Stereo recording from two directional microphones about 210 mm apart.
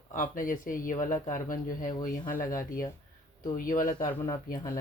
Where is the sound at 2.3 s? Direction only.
15° left (ahead or behind).